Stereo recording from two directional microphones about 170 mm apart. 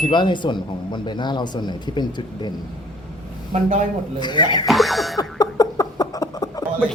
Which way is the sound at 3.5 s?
45° right (ahead or behind).